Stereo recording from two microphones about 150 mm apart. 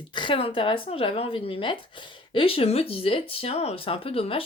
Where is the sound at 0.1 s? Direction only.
30° left (ahead or behind).